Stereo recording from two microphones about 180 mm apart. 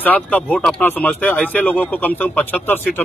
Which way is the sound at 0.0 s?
10° left (ahead or behind).